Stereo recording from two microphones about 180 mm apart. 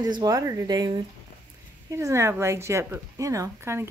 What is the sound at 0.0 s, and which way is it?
A woman's voice, 20° right (ahead or behind).